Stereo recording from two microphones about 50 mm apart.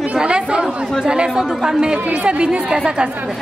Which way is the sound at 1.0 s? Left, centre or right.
Centre.